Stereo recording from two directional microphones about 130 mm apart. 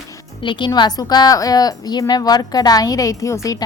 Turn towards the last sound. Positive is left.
turn(degrees=25)  # may be behind; listen again after turning